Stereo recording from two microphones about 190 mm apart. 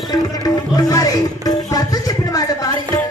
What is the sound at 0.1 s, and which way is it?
Music, 20° left (ahead or behind).